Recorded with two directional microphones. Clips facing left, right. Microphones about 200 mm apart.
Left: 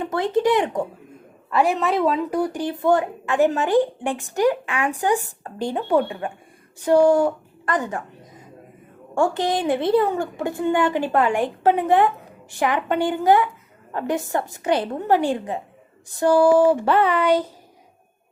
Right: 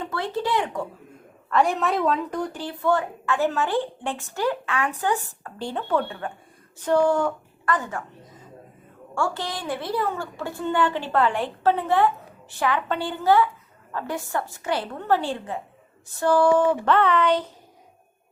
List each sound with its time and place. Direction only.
0.0 s speech: 20° left (ahead or behind)
1.5 s a woman's voice: 5° left (ahead or behind)
9.1 s a woman's voice: 20° left (ahead or behind)